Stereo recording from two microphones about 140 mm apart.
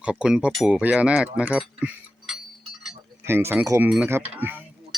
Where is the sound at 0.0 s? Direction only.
5° right (ahead or behind).